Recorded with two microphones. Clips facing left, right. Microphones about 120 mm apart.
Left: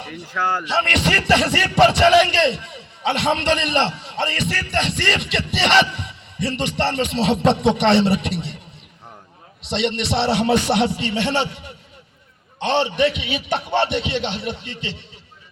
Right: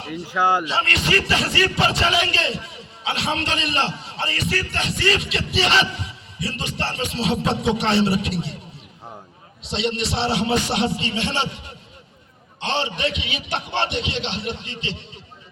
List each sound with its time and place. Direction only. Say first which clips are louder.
0.0 s speech: right 3 dB; 10° right (ahead or behind)
0.9 s music: left 4 dB; 65° left (ahead or behind)
9.6 s speech: left 2 dB; 65° left (ahead or behind)
12.5 s a sound: left 5 dB; 55° left (ahead or behind)
13.3 s speech: left 5 dB; 50° left (ahead or behind)